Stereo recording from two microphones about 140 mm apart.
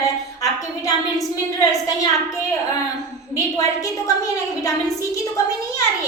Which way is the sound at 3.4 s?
25° left (ahead or behind).